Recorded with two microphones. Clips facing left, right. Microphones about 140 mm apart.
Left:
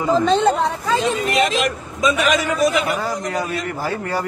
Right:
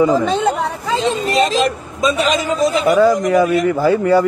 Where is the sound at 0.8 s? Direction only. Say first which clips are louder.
Right 3 dB; 20° right (ahead or behind).